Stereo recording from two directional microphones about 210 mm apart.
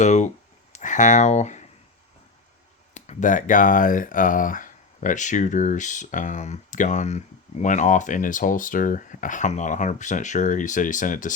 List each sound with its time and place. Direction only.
0.0 s speech: 35° left (ahead or behind)
2.9 s speech: 35° left (ahead or behind)